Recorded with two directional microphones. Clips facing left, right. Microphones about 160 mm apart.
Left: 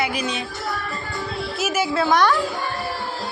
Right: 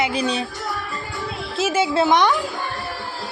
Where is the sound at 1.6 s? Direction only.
25° right (ahead or behind).